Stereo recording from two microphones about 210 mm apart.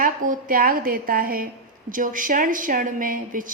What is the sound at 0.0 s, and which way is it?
A woman's voice, 40° right (ahead or behind).